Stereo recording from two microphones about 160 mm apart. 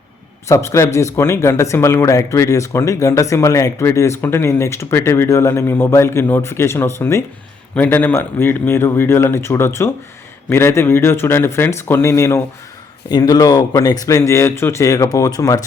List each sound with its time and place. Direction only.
0.4 s speech: 20° left (ahead or behind)